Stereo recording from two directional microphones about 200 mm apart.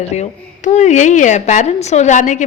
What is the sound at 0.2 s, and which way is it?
Speech, 35° left (ahead or behind).